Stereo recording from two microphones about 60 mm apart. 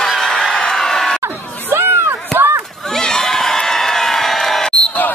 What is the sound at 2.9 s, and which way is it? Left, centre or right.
Crowd, centre.